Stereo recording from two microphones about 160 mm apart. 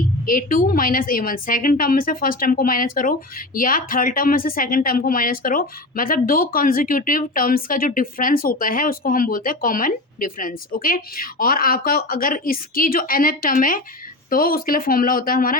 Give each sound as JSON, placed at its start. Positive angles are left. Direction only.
{"t": 0.3, "sound": "a woman's voice", "side_deg": 60}